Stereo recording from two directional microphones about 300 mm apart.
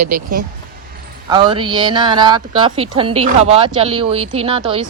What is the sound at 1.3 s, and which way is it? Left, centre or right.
Speech, centre.